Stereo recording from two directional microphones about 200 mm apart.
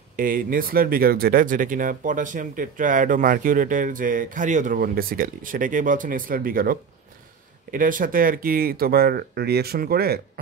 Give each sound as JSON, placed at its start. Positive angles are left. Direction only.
{"t": 0.1, "sound": "speech", "side_deg": -45}